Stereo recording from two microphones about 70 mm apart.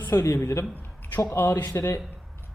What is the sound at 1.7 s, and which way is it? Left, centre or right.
Speech, left.